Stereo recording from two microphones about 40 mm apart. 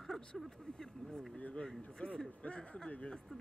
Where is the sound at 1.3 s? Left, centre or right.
Left.